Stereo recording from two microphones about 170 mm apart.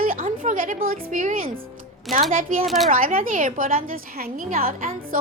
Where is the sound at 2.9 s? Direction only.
55° right (ahead or behind).